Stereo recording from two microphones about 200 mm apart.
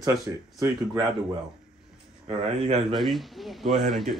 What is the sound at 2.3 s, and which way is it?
Speech, 30° right (ahead or behind).